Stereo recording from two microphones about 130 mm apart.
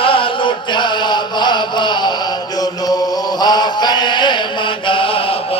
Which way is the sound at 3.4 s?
35° left (ahead or behind).